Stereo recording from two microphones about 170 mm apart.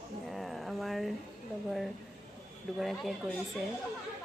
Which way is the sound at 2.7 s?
Centre (ahead or behind).